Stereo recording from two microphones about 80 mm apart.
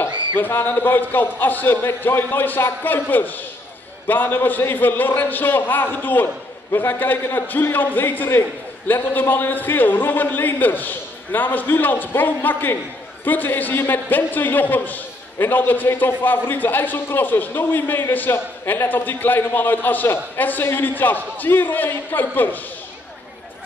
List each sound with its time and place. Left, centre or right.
0.4 s a man's voice: left